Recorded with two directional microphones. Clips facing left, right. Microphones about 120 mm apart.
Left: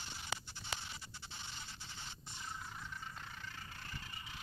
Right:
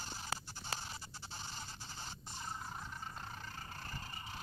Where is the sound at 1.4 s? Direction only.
40° right (ahead or behind).